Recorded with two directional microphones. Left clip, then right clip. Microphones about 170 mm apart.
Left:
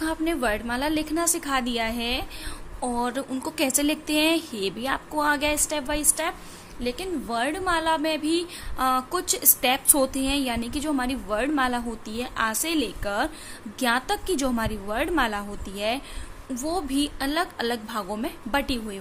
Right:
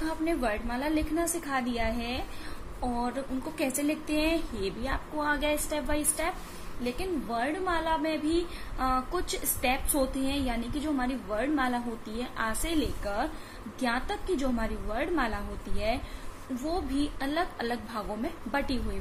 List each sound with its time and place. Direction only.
0.0 s a woman's voice: 50° left (ahead or behind)